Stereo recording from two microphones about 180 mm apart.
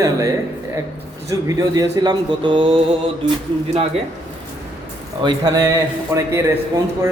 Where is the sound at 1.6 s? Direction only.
20° right (ahead or behind).